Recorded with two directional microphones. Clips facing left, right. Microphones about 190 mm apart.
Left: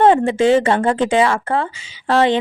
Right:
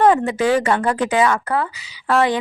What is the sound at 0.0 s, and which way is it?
Speech, 25° left (ahead or behind).